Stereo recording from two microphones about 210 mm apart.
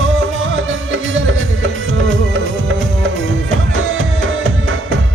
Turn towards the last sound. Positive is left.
turn(degrees=-65)  # may be behind; listen again after turning